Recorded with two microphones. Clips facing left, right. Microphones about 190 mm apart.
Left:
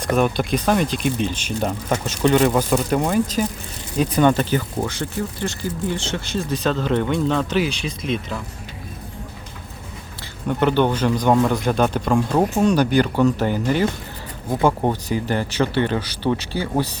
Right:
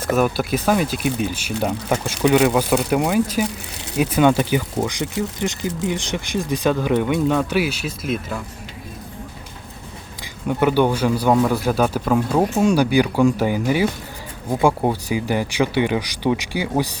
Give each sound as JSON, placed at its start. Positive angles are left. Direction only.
{"t": 0.0, "sound": "speech", "side_deg": -5}
{"t": 10.4, "sound": "speech", "side_deg": -10}